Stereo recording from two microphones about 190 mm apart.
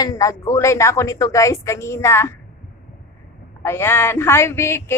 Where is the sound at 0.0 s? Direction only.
15° left (ahead or behind).